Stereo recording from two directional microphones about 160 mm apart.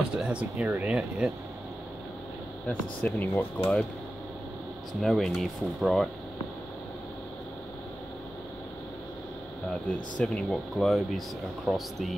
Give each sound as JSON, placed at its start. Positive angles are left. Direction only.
{"t": 0.2, "sound": "speech", "side_deg": -5}
{"t": 3.0, "sound": "speech", "side_deg": 10}
{"t": 5.0, "sound": "speech", "side_deg": 0}
{"t": 10.1, "sound": "speech", "side_deg": 5}